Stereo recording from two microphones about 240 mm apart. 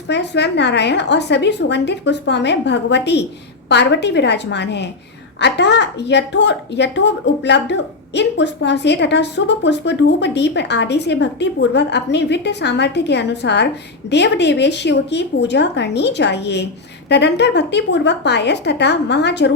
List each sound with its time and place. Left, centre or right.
0.1 s speech: left